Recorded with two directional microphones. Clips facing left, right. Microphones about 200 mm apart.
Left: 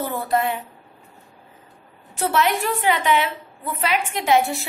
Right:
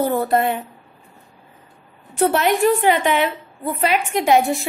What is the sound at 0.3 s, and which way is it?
Speech, 60° right (ahead or behind).